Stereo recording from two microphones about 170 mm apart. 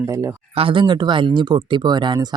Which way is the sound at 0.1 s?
15° right (ahead or behind).